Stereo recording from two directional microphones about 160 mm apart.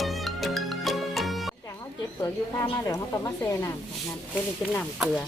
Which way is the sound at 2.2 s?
15° left (ahead or behind).